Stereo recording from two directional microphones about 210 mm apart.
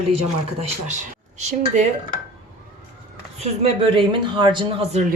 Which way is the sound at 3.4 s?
25° right (ahead or behind).